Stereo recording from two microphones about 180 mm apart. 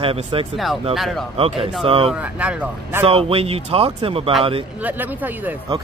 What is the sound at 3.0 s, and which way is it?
Speech, 30° right (ahead or behind).